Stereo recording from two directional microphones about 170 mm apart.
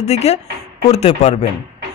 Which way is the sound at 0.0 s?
40° left (ahead or behind).